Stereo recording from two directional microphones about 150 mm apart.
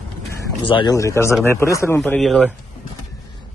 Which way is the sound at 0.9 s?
20° left (ahead or behind).